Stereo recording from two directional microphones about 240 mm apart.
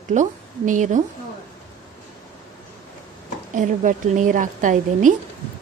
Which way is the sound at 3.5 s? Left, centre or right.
Right.